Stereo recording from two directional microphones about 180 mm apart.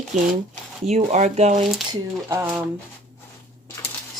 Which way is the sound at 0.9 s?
40° right (ahead or behind).